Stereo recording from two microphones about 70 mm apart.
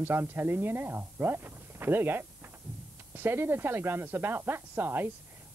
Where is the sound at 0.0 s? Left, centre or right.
Right.